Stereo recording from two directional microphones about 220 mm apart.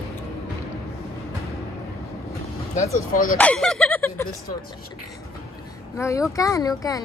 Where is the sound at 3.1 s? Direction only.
40° left (ahead or behind).